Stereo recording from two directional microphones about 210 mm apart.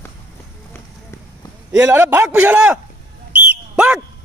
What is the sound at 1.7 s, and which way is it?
A man's voice, 10° right (ahead or behind).